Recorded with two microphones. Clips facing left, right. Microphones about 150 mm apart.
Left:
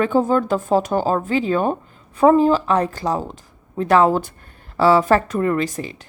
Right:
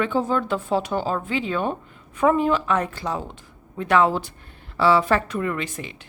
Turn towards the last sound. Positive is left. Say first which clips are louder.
# left 7 dB
turn(degrees=35)  # may be behind; listen again after turning